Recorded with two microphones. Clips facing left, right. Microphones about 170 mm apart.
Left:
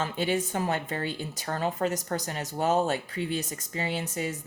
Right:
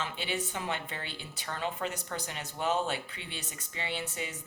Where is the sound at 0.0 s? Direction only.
45° left (ahead or behind).